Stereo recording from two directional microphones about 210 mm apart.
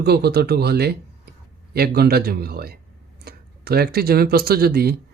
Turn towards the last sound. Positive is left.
turn(degrees=-45)  # may be behind; listen again after turning